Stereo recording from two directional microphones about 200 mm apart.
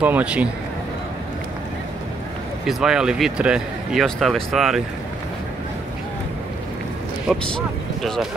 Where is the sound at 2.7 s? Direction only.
Centre (ahead or behind).